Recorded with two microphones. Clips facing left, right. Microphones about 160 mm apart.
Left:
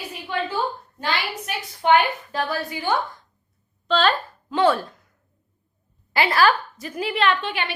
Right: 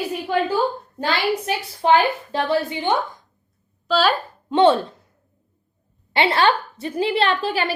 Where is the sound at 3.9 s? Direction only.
5° right (ahead or behind).